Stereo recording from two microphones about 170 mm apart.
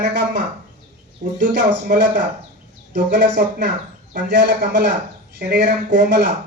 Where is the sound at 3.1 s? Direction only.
85° right.